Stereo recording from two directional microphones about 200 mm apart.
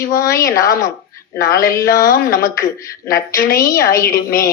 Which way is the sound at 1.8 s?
45° left (ahead or behind).